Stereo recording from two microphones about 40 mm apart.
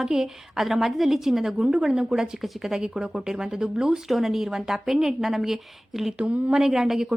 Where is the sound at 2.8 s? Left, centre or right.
Right.